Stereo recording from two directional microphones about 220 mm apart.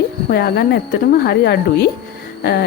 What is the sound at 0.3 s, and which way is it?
Speech, 45° left (ahead or behind).